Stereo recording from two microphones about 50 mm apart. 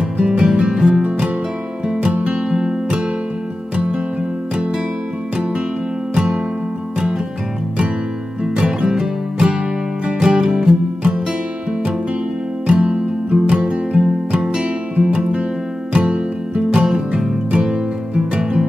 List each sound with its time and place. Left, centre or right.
0.2 s music: centre
6.1 s music: centre
8.5 s music: centre
12.6 s music: centre